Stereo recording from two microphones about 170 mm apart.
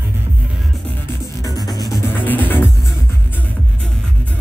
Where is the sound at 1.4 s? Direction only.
20° left (ahead or behind).